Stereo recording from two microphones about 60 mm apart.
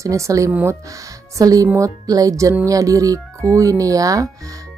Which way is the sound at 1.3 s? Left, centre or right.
Right.